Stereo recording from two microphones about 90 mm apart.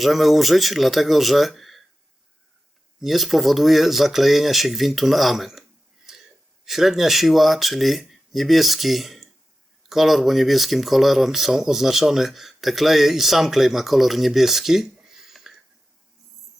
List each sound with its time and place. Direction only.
0.0 s speech: centre (ahead or behind)
3.0 s speech: centre (ahead or behind)
6.1 s wheeze: 5° right (ahead or behind)
6.7 s speech: 5° right (ahead or behind)